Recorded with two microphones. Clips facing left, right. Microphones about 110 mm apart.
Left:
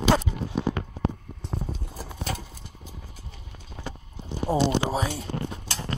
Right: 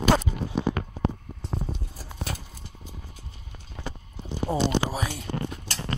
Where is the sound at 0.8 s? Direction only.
70° right (ahead or behind).